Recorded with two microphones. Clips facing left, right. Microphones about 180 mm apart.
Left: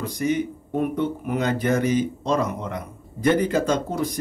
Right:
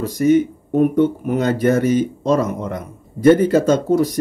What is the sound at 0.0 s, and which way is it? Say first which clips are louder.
Speech: right 9 dB; 45° right (ahead or behind).